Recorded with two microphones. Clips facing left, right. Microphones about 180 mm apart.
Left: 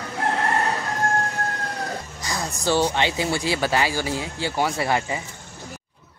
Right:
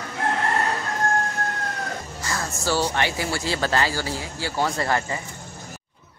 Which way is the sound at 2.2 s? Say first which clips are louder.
Even; 15° left (ahead or behind).